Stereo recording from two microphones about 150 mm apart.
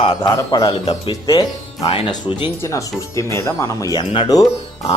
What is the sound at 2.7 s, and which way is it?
Speech, 20° left (ahead or behind).